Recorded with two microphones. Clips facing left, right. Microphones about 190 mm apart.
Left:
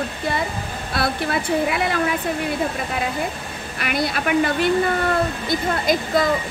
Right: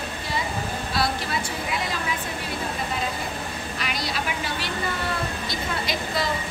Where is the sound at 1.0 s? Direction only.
55° left (ahead or behind).